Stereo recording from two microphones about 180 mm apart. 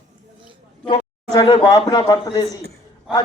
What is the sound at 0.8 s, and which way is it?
A man's voice, 30° left (ahead or behind).